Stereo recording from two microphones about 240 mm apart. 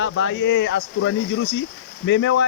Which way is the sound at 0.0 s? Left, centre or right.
Left.